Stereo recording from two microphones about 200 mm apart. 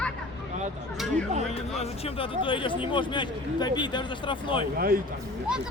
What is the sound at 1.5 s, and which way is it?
Speech, 30° left (ahead or behind).